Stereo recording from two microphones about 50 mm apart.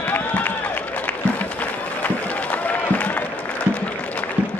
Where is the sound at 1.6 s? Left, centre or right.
Left.